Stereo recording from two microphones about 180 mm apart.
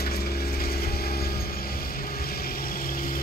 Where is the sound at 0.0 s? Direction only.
60° left (ahead or behind).